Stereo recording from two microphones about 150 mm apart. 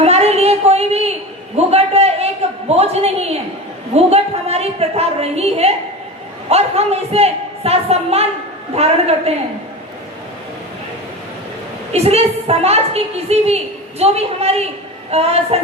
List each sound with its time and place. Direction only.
0.0 s a sound: 45° right (ahead or behind)
1.5 s a man's voice: 45° right (ahead or behind)
11.9 s a woman's voice: 45° right (ahead or behind)